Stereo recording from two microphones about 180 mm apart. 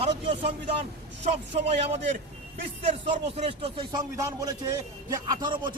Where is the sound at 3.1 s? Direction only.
35° right (ahead or behind).